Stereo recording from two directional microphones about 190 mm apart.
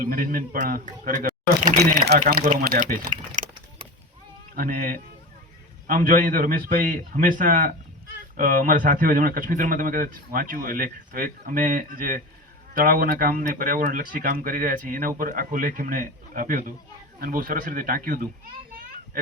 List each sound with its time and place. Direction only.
0.0 s speech: 50° right (ahead or behind)
4.5 s speech: 50° right (ahead or behind)